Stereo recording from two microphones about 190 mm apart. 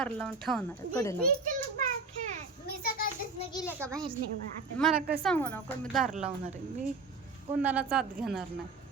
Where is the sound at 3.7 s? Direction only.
15° right (ahead or behind).